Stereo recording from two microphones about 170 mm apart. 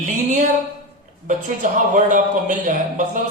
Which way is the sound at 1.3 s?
50° right (ahead or behind).